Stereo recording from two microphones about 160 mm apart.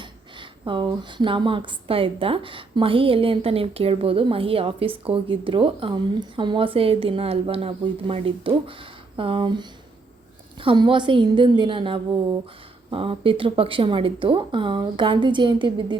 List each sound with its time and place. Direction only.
0.0 s speech: 30° right (ahead or behind)